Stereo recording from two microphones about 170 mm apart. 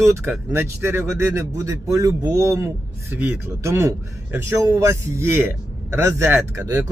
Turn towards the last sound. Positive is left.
turn(degrees=-15)  # may be behind; listen again after turning